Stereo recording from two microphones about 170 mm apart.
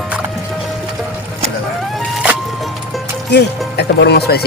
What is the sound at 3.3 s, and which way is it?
Speech, 75° left (ahead or behind).